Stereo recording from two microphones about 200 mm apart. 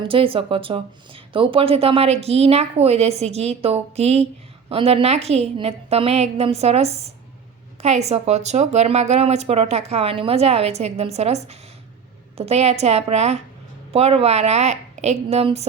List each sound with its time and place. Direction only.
0.0 s speech: 25° right (ahead or behind)